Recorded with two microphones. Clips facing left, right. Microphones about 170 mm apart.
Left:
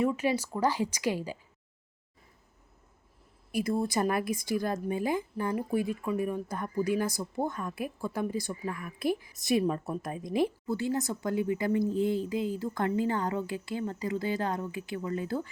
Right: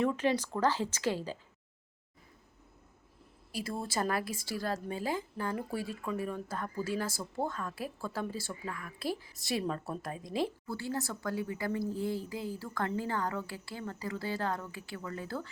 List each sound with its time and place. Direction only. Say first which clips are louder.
0.0 s speech: left 2 dB; 10° left (ahead or behind)
3.5 s a woman's voice: left 7 dB; 20° left (ahead or behind)